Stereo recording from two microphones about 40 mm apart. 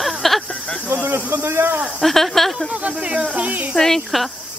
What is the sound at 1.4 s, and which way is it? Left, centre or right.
Speech, right.